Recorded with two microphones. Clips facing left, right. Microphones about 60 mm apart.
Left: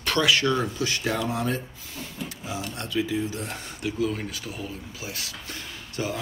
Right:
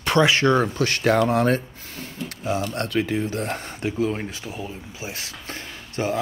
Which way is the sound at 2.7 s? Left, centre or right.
Right.